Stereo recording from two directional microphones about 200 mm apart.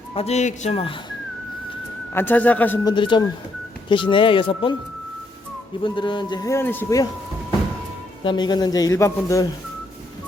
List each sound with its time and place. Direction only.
0.1 s speech: 30° left (ahead or behind)
2.1 s a man's voice: 10° left (ahead or behind)
2.9 s a man's voice: 25° left (ahead or behind)
5.8 s a man's voice: 25° left (ahead or behind)
8.2 s a man's voice: 25° left (ahead or behind)